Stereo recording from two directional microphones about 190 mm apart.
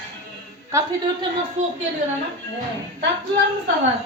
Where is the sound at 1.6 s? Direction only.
35° right (ahead or behind).